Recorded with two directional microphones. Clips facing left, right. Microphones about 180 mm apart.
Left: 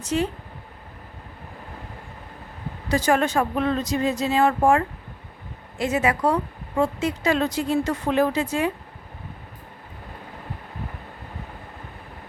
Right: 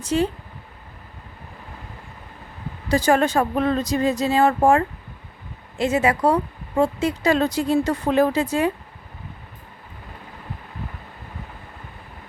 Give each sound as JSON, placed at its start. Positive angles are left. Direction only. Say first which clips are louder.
{"t": 0.0, "sound": "speech", "louder": "right 3 dB", "side_deg": -35}
{"t": 2.9, "sound": "speech", "louder": "right 3 dB", "side_deg": -35}